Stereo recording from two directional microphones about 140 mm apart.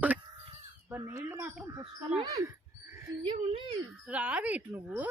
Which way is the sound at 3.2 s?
35° right (ahead or behind).